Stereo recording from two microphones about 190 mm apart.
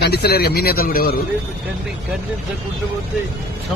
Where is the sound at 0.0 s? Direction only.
55° left (ahead or behind).